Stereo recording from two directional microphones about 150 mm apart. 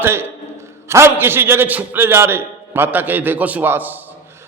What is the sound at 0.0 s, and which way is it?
A man's voice, 15° right (ahead or behind).